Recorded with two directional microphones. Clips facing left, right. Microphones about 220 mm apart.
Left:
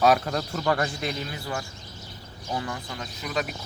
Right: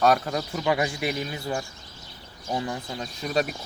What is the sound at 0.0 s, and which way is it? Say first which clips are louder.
A man's voice: even; centre (ahead or behind).